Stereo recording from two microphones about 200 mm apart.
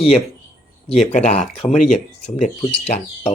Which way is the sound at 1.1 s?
35° left (ahead or behind).